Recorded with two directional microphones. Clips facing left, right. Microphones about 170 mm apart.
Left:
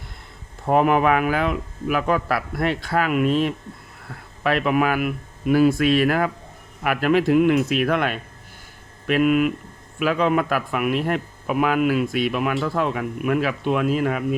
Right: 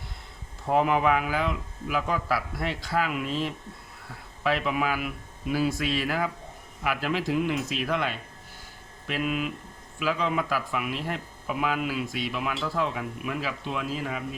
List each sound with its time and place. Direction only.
0.7 s speech: 60° left (ahead or behind)